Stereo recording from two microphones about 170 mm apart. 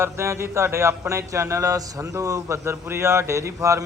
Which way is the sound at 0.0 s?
15° right (ahead or behind).